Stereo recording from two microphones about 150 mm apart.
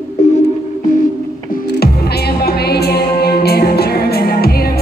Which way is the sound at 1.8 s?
90° left.